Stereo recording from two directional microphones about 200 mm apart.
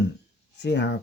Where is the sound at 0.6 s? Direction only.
60° left (ahead or behind).